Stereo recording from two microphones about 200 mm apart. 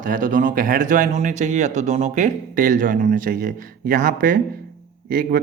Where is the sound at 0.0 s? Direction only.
40° right (ahead or behind).